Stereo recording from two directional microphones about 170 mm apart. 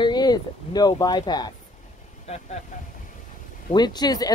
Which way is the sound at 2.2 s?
40° left (ahead or behind).